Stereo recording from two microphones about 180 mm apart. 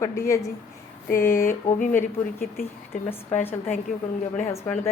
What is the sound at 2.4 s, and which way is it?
Speech, 50° left (ahead or behind).